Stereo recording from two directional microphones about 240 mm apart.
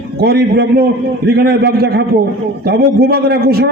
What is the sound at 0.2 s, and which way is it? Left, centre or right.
A man's voice, right.